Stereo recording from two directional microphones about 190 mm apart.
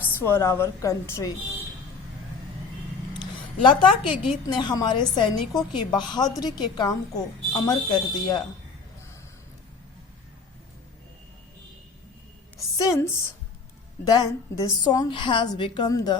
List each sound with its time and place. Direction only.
0.0 s a woman's voice: 10° left (ahead or behind)
3.2 s a sound: 25° left (ahead or behind)
4.4 s a woman's voice: 25° left (ahead or behind)
12.7 s a woman's voice: 15° left (ahead or behind)